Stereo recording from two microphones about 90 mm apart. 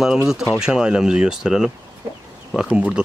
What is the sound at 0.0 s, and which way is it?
Speech, 5° right (ahead or behind).